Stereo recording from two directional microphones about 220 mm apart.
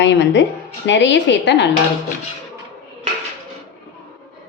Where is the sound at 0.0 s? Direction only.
55° left (ahead or behind).